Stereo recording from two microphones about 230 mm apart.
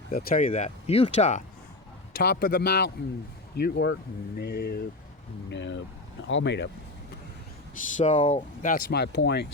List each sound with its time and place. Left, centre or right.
0.1 s speech: left
2.1 s speech: left
7.9 s speech: left